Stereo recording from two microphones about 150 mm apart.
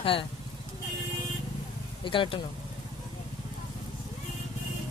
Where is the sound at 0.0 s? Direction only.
35° left (ahead or behind).